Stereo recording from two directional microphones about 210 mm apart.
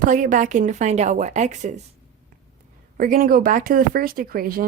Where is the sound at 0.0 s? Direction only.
40° right (ahead or behind).